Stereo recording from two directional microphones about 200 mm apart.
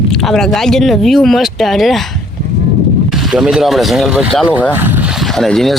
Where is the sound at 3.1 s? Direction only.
Centre (ahead or behind).